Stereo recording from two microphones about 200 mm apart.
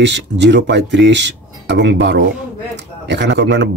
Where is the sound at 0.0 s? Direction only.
60° right (ahead or behind).